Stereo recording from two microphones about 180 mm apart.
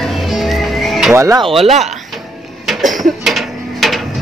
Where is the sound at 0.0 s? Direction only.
Centre (ahead or behind).